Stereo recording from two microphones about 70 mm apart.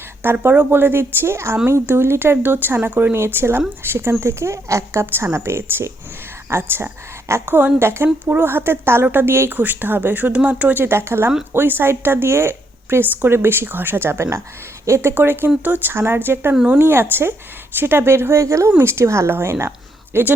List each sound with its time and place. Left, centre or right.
0.3 s a woman's voice: right
15.1 s a woman's voice: right